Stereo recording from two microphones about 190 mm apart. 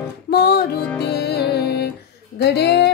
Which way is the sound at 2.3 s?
60° left (ahead or behind).